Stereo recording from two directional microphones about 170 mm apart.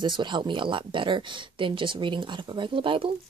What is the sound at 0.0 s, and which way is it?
Speech, 25° right (ahead or behind).